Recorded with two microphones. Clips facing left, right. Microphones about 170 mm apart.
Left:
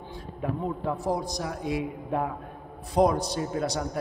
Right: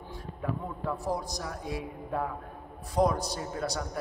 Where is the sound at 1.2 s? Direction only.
75° left (ahead or behind).